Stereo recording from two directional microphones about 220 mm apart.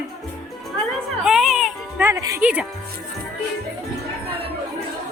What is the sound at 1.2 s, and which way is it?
Music, centre (ahead or behind).